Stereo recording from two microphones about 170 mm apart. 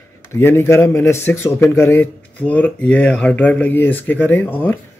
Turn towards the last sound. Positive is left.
turn(degrees=10)  # may be behind; listen again after turning